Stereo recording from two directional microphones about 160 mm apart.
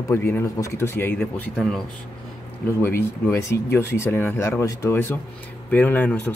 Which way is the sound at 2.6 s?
15° left (ahead or behind).